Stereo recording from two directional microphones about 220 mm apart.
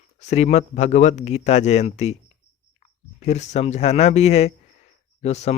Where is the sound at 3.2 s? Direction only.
30° left (ahead or behind).